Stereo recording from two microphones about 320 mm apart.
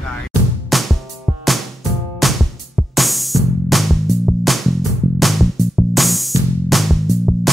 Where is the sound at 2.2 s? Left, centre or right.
Centre.